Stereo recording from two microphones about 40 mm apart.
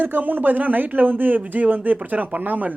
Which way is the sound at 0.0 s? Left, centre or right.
Right.